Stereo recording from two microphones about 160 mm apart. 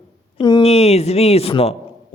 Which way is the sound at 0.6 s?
40° left (ahead or behind).